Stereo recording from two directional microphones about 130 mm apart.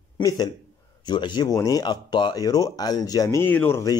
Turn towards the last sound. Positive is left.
turn(degrees=15)  # may be behind; listen again after turning